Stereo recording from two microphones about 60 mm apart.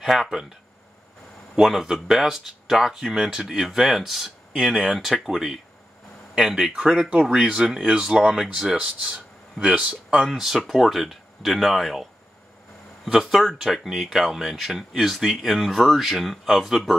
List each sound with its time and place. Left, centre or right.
0.0 s speech: centre
1.5 s speech: centre
10.2 s speech: centre